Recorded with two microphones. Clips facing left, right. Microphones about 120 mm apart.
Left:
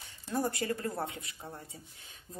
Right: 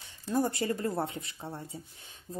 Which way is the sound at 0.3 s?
25° right (ahead or behind).